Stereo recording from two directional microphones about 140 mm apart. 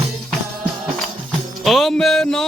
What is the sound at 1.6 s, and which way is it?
Music, centre (ahead or behind).